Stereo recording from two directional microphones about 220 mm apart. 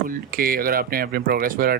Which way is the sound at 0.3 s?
40° right (ahead or behind).